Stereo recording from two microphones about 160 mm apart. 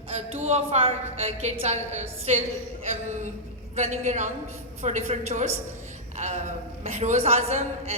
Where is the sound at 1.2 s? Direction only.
45° right (ahead or behind).